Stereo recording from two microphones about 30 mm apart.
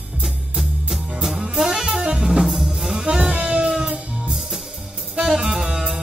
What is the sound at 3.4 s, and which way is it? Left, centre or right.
Music, right.